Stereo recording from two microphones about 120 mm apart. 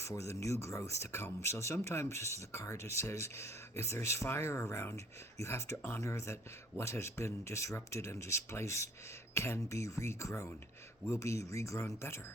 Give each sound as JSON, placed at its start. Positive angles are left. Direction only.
{"t": 0.0, "sound": "speech", "side_deg": 25}